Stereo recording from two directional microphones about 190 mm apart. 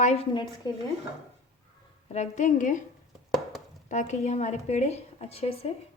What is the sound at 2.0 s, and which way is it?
Speech, 35° left (ahead or behind).